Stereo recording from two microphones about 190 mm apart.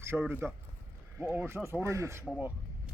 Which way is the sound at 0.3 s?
10° right (ahead or behind).